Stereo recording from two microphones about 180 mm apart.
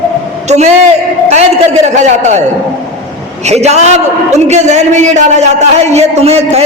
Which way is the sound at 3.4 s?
40° right (ahead or behind).